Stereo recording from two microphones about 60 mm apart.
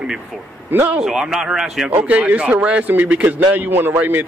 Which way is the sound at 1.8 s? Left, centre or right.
Right.